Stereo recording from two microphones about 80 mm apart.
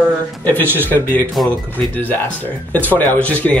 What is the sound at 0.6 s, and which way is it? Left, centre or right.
Speech, right.